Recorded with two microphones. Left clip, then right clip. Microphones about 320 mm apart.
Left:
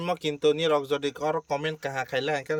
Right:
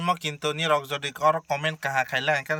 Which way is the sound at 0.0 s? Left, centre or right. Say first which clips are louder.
Left 1 dB; centre.